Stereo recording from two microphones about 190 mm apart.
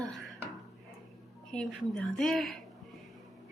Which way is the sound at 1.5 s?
5° left (ahead or behind).